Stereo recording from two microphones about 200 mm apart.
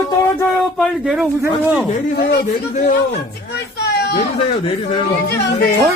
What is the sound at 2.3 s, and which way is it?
A man's voice, 40° left (ahead or behind).